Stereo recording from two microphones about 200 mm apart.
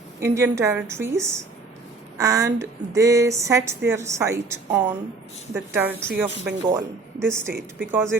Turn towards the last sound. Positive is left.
turn(degrees=-10)  # may be behind; listen again after turning